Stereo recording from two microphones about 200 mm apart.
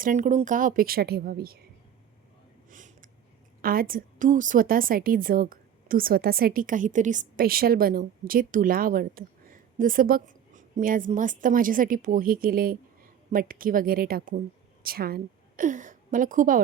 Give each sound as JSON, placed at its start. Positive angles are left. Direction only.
{"t": 0.0, "sound": "a woman's voice", "side_deg": -40}
{"t": 2.6, "sound": "a sound", "side_deg": -40}
{"t": 3.6, "sound": "a woman's voice", "side_deg": -45}